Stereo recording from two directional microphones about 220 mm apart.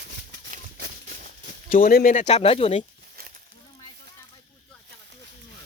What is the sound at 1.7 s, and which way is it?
Speech, 40° left (ahead or behind).